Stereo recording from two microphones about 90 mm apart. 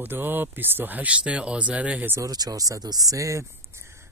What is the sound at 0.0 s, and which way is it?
Speech, 20° right (ahead or behind).